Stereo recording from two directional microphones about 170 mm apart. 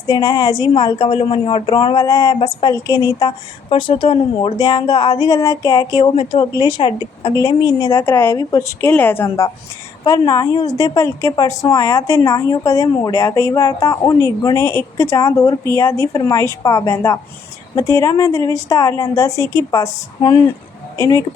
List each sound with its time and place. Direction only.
0.1 s a woman's voice: 20° left (ahead or behind)
0.7 s a woman's voice: 30° left (ahead or behind)
2.3 s speech: 30° left (ahead or behind)
2.7 s a woman's voice: 20° left (ahead or behind)